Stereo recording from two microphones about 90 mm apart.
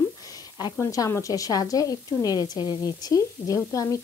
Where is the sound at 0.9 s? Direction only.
35° left (ahead or behind).